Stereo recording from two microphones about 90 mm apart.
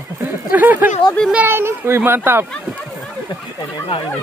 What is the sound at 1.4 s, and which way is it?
A child's voice, 25° right (ahead or behind).